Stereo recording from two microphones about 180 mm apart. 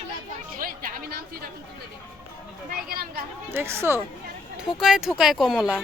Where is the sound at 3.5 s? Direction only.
15° right (ahead or behind).